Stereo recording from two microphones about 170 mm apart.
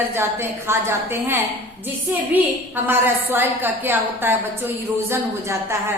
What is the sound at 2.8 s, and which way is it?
A woman's voice, 10° right (ahead or behind).